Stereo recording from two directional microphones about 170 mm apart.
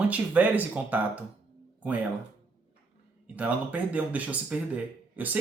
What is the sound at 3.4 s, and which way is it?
Speech, 10° right (ahead or behind).